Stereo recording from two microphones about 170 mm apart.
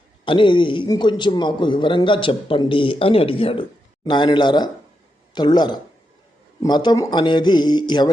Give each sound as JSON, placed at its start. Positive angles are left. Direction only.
{"t": 0.3, "sound": "a man's voice", "side_deg": 30}